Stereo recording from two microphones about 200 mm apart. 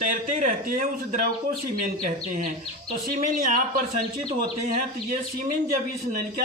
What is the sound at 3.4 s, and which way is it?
Speech, 40° right (ahead or behind).